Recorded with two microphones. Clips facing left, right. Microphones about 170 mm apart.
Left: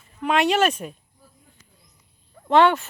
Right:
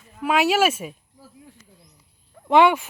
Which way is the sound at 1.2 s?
90° right.